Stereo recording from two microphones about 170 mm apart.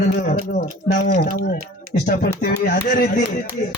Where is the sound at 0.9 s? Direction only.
60° left (ahead or behind).